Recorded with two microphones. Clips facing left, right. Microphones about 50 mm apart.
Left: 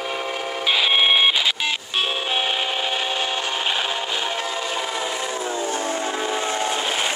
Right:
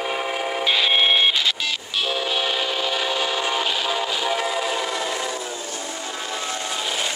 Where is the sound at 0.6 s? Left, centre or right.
Centre.